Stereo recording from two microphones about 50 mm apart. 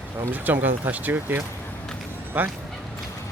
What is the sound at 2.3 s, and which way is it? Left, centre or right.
Speech, right.